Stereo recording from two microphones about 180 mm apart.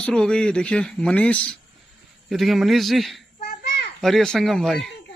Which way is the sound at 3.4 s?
60° left (ahead or behind).